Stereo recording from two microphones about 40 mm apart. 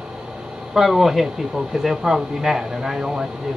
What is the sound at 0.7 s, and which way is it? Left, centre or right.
Speech, centre.